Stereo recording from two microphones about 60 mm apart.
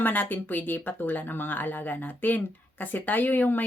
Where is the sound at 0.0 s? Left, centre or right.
Left.